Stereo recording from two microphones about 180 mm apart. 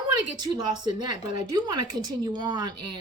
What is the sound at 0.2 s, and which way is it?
A woman's voice, 25° right (ahead or behind).